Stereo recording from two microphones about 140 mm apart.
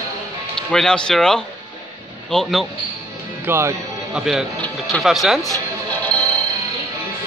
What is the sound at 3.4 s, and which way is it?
Speech, 20° right (ahead or behind).